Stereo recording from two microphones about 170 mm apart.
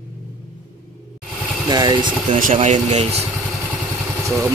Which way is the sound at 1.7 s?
25° right (ahead or behind).